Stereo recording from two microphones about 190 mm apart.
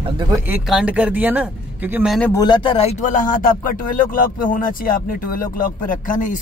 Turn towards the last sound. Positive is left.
turn(degrees=45)  # may be behind; listen again after turning